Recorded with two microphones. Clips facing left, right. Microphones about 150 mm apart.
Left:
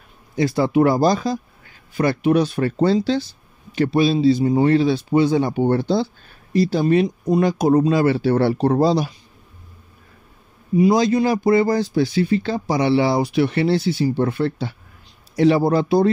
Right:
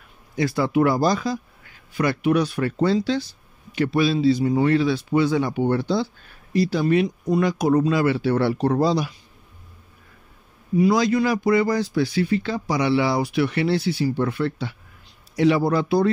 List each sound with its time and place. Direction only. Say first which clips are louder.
0.4 s speech: left 3 dB; 25° left (ahead or behind)
10.8 s speech: left 3 dB; 25° left (ahead or behind)